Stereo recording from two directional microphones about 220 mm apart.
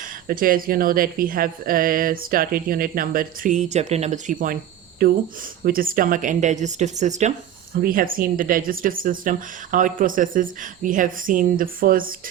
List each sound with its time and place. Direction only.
0.0 s a woman's voice: 40° right (ahead or behind)